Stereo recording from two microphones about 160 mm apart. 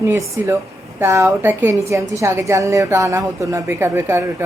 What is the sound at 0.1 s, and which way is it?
A woman's voice, 20° right (ahead or behind).